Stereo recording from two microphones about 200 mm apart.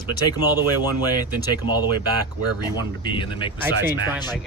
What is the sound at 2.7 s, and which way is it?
Speech, 25° left (ahead or behind).